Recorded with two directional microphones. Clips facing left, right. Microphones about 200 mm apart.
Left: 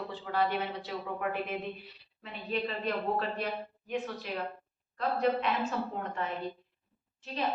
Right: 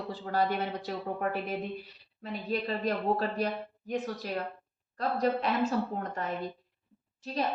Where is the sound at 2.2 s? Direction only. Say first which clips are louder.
Right 2 dB; 40° right (ahead or behind).